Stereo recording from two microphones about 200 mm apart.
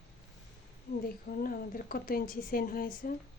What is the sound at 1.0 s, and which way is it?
A woman's voice, 45° left (ahead or behind).